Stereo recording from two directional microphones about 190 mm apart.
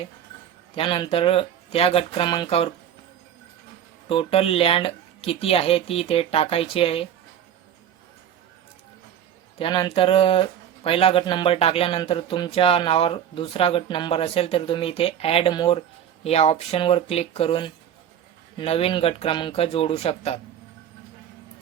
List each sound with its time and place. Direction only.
0.8 s speech: 25° left (ahead or behind)
4.1 s speech: 30° left (ahead or behind)
9.6 s speech: 25° left (ahead or behind)